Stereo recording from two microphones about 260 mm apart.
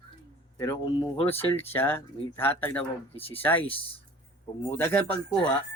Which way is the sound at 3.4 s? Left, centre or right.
Centre.